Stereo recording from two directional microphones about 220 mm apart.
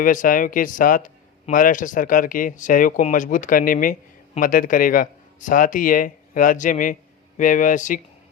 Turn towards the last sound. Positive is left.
turn(degrees=35)  # may be behind; listen again after turning